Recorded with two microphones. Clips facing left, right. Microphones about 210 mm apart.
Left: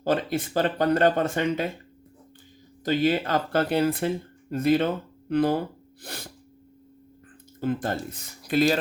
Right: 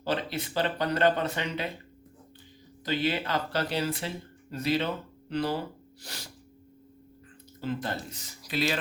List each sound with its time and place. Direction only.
0.0 s speech: 50° left (ahead or behind)
2.8 s speech: 45° left (ahead or behind)
7.6 s speech: 50° left (ahead or behind)